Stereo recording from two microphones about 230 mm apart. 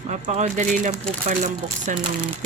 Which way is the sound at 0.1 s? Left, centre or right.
Right.